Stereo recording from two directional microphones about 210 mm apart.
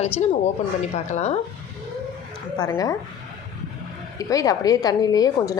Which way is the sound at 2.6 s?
15° left (ahead or behind).